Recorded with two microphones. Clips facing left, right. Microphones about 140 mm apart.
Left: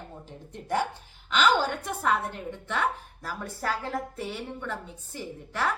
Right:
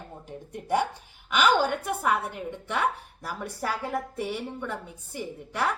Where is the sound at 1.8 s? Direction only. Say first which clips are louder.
Right 1 dB; 10° right (ahead or behind).